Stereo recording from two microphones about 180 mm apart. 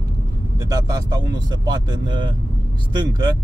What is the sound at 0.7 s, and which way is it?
Speech, 20° right (ahead or behind).